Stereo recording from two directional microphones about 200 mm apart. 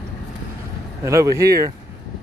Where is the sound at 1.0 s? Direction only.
15° right (ahead or behind).